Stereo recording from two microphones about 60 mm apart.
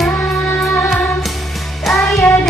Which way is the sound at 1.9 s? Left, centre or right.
Centre.